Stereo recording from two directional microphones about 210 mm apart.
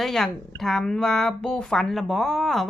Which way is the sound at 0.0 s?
Centre (ahead or behind).